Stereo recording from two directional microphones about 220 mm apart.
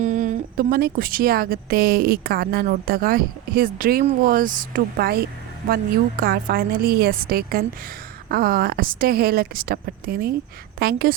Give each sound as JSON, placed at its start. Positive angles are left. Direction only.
{"t": 0.0, "sound": "a woman's voice", "side_deg": -35}